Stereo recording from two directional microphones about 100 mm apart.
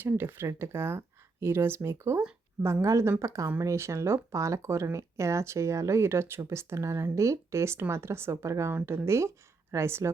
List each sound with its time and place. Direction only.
0.0 s a woman's voice: 25° right (ahead or behind)